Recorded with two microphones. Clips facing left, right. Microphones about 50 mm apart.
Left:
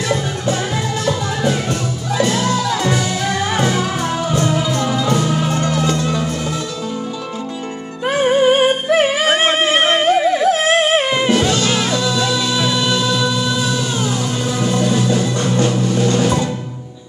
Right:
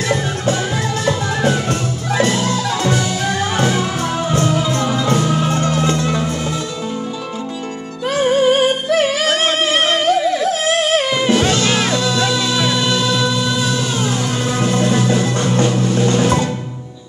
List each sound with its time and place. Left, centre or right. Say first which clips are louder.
0.0 s music: right 1 dB; centre
3.0 s music: even; centre
5.7 s music: right 1 dB; right
8.0 s music: left 1 dB; left
11.5 s music: right 1 dB; right
11.9 s music: even; centre
12.7 s music: even; centre
14.6 s music: right 1 dB; right
15.9 s music: even; centre